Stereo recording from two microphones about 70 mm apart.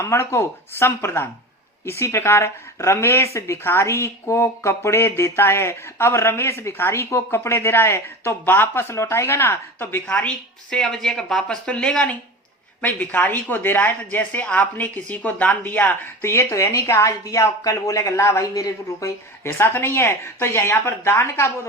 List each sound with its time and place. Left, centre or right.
0.0 s speech: left
10.1 s speech: centre
12.8 s speech: left
16.2 s speech: left
19.5 s speech: left